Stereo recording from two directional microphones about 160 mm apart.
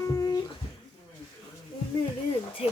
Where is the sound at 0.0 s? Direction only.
20° left (ahead or behind).